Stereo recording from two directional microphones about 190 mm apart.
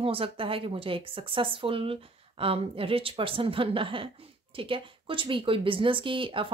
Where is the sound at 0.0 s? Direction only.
30° right (ahead or behind).